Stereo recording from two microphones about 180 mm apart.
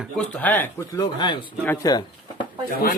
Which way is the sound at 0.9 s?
25° left (ahead or behind).